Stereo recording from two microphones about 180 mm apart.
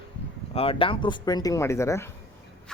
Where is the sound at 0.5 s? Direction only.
30° left (ahead or behind); by 2.0 s 15° left (ahead or behind).